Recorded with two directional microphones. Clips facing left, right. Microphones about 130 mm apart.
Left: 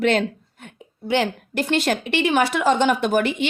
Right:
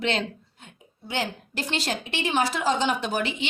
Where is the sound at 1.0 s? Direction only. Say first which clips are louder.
Left 8 dB; 65° left (ahead or behind).